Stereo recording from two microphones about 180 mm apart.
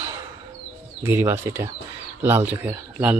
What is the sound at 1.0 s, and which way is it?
Speech, 15° right (ahead or behind).